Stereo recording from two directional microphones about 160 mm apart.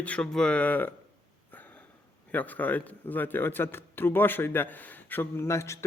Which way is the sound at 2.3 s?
10° left (ahead or behind).